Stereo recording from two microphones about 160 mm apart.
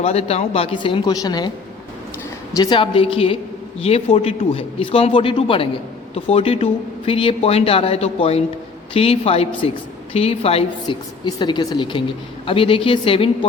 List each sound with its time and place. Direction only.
0.0 s speech: 40° left (ahead or behind); by 1.5 s 25° left (ahead or behind)
2.5 s speech: 25° left (ahead or behind)
11.3 s speech: 30° left (ahead or behind)